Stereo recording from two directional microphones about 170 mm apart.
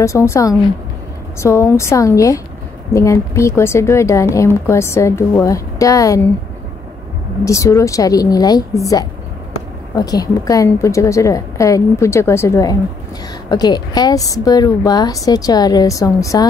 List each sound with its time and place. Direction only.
0.0 s a woman's voice: 15° left (ahead or behind)
7.4 s a woman's voice: 20° left (ahead or behind)